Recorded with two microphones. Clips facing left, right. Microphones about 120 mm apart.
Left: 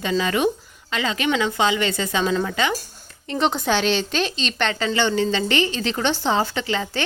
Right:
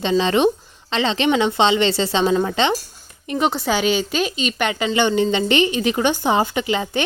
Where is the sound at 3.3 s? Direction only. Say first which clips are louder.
Right 1 dB; 5° right (ahead or behind).